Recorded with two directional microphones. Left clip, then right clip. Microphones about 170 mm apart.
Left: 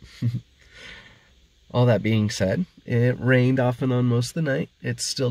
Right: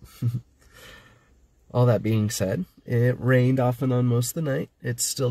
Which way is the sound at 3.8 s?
35° left (ahead or behind).